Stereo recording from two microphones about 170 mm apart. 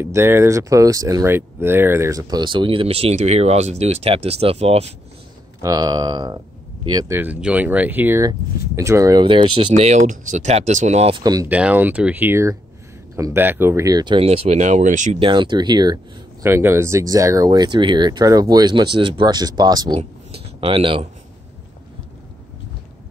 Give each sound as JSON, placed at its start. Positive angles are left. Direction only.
{"t": 0.0, "sound": "speech", "side_deg": -15}
{"t": 5.6, "sound": "speech", "side_deg": -20}
{"t": 9.2, "sound": "speech", "side_deg": -30}
{"t": 11.4, "sound": "speech", "side_deg": -10}
{"t": 15.1, "sound": "speech", "side_deg": -30}
{"t": 16.4, "sound": "speech", "side_deg": -15}
{"t": 20.0, "sound": "a sound", "side_deg": -35}